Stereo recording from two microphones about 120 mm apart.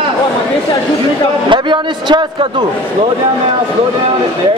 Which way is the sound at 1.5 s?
40° right (ahead or behind).